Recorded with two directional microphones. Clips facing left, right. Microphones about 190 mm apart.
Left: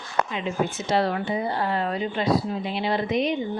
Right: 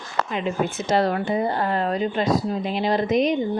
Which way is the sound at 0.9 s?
45° right (ahead or behind).